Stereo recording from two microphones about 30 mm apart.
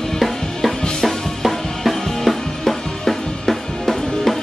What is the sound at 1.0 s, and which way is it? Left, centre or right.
Music, centre.